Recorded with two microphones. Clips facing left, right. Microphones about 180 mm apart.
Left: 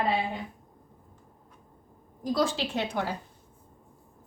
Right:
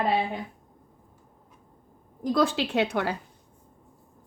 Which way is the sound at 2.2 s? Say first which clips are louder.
Right 3 dB; 60° right (ahead or behind).